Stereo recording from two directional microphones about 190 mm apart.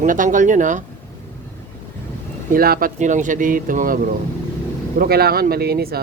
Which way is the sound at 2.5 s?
50° right (ahead or behind).